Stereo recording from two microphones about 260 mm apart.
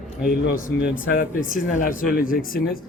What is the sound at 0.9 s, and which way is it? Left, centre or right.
Speech, left.